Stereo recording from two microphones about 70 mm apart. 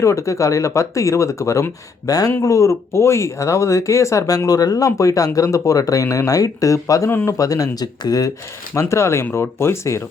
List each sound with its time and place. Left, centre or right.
0.0 s speech: left
2.0 s speech: left
2.4 s speech: left
8.7 s speech: left